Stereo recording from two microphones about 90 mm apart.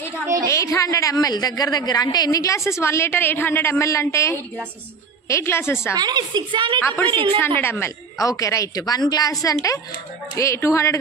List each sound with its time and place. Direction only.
0.5 s a man's voice: 35° left (ahead or behind)
5.9 s a woman's voice: 55° right (ahead or behind)
6.8 s a woman's voice: 25° left (ahead or behind)
7.1 s a woman's voice: 65° right (ahead or behind)
7.3 s a woman's voice: 25° left (ahead or behind)
8.3 s a man's voice: 40° left (ahead or behind)